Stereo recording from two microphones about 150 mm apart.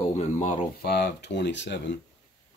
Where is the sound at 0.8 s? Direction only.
90° left.